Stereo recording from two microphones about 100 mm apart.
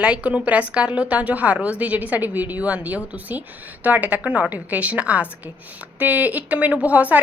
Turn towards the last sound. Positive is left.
turn(degrees=-15)  # may be behind; listen again after turning